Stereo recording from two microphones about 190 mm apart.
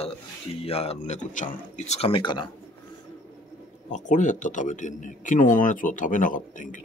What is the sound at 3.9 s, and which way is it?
Speech, 40° left (ahead or behind).